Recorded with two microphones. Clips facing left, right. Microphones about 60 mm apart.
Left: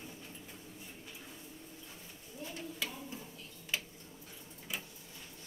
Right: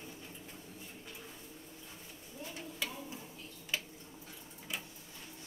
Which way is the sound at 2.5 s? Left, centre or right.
Centre.